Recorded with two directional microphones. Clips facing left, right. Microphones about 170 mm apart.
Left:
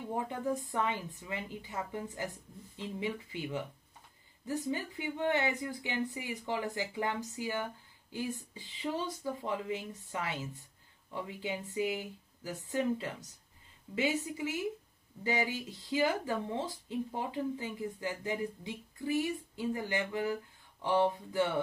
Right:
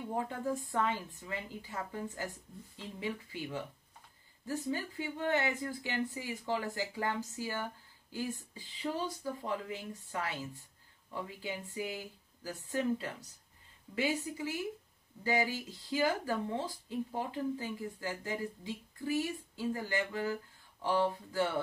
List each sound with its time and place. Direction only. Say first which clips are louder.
0.3 s speech: left 1 dB; 20° left (ahead or behind)